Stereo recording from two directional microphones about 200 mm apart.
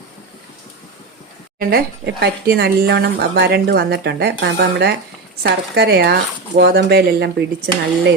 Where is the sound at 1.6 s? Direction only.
50° right (ahead or behind).